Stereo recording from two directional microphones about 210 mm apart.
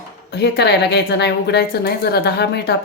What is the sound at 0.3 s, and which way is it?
A woman's voice, 50° left (ahead or behind).